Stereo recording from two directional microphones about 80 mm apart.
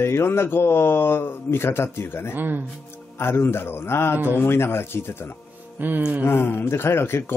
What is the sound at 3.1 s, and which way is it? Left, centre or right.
Speech, left.